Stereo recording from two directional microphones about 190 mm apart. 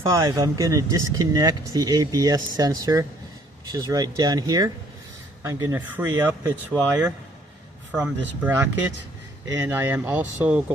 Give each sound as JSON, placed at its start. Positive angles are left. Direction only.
{"t": 0.0, "sound": "speech", "side_deg": -15}
{"t": 8.4, "sound": "speech", "side_deg": -10}